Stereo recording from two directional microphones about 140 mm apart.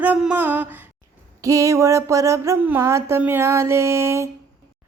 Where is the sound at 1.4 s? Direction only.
25° right (ahead or behind).